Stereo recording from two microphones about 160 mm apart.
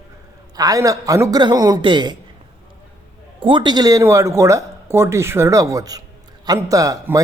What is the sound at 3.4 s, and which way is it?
Speech, 30° right (ahead or behind).